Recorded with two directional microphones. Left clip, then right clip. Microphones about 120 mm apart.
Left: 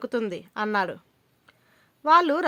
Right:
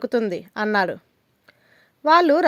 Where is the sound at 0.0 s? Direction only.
30° right (ahead or behind).